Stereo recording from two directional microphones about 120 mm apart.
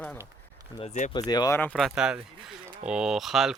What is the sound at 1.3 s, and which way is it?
Speech, 35° left (ahead or behind).